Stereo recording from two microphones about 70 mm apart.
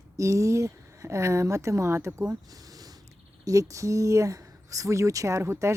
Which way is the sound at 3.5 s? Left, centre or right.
Right.